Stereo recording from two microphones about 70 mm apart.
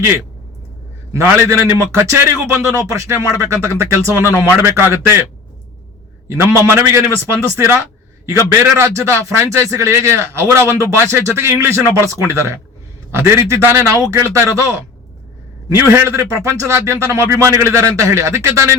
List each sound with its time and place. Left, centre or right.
1.1 s a man's voice: right
6.2 s a man's voice: right